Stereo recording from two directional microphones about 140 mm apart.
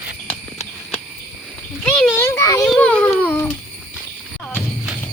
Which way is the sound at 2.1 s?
20° left (ahead or behind).